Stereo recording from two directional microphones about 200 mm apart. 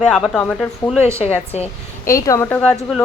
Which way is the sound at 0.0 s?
5° left (ahead or behind).